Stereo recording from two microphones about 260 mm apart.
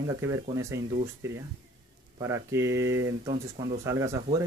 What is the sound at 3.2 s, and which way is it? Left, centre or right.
Speech, right.